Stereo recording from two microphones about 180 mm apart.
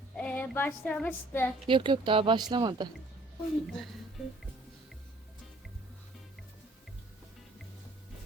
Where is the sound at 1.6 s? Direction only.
25° right (ahead or behind).